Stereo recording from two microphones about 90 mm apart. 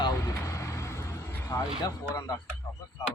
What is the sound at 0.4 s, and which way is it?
Vehicle, 35° left (ahead or behind).